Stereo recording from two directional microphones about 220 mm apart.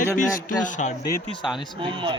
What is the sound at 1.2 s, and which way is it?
Speech, centre (ahead or behind).